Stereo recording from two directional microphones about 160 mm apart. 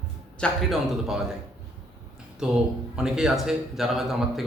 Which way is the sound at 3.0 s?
5° right (ahead or behind).